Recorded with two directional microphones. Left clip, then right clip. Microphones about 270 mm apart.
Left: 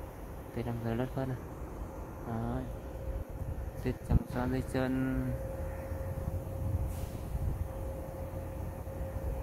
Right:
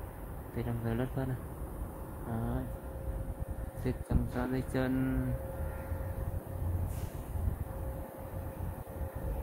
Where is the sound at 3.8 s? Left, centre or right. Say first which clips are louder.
Even; centre.